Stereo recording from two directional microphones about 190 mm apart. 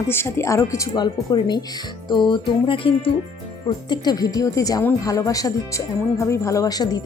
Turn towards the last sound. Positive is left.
turn(degrees=20)  # may be behind; listen again after turning